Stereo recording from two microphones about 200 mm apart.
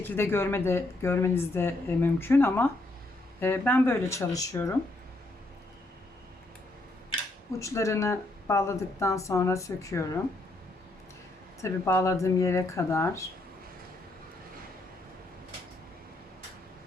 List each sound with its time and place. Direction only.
0.0 s speech: 10° left (ahead or behind)
7.6 s speech: 15° left (ahead or behind)
11.6 s speech: 15° left (ahead or behind)